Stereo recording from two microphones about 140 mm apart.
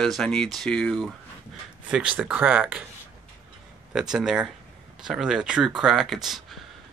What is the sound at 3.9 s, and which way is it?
Speech, 5° right (ahead or behind).